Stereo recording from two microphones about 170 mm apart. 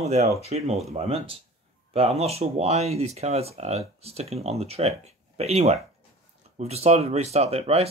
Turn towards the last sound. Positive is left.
turn(degrees=-35)  # may be behind; listen again after turning